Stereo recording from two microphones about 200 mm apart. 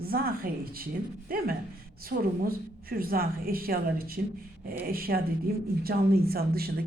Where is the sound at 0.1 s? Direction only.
50° right (ahead or behind).